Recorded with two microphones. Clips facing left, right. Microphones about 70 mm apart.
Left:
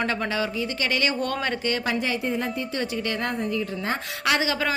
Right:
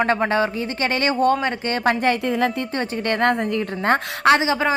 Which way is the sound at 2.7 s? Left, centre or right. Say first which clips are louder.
Right 5 dB; right.